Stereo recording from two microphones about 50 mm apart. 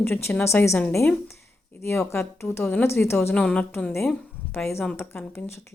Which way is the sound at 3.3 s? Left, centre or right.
Left.